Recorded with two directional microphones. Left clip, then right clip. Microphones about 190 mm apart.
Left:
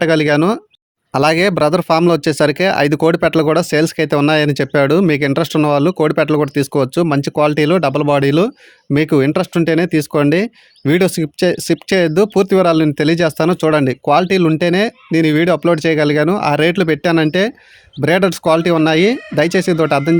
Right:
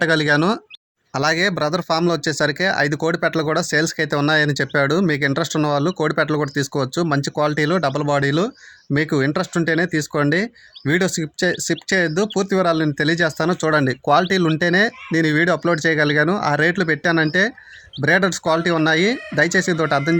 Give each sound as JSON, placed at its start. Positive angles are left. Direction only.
{"t": 0.0, "sound": "speech", "side_deg": 25}
{"t": 1.1, "sound": "speech", "side_deg": 40}